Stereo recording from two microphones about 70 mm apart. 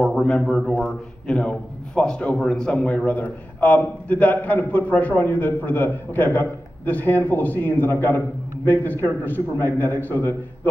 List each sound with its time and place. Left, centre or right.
0.0 s a man's voice: centre; by 10.7 s left